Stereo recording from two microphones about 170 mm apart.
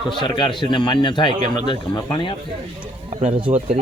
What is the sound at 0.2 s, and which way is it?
Speech, 25° left (ahead or behind).